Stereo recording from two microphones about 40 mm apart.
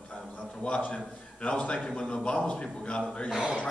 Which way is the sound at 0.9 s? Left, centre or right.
Left.